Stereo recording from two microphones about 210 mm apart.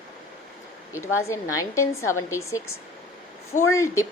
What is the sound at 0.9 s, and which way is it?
A woman's voice, 10° left (ahead or behind).